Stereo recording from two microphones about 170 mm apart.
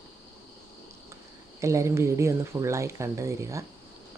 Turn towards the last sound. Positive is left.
turn(degrees=-20)  # may be behind; listen again after turning